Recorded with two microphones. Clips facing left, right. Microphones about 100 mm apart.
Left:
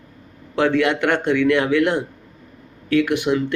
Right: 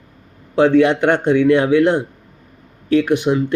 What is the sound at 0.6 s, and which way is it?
A man's voice, 20° right (ahead or behind).